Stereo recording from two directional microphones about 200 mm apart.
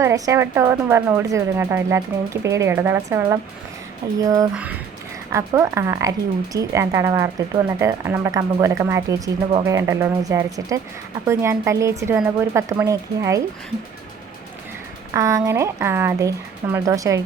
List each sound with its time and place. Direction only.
0.0 s speech: 15° right (ahead or behind)
15.1 s speech: 15° right (ahead or behind)